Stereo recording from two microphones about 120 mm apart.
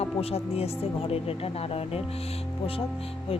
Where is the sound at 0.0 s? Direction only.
55° left (ahead or behind).